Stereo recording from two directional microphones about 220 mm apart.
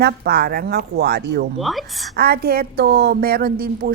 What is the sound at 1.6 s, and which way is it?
Speech, centre (ahead or behind).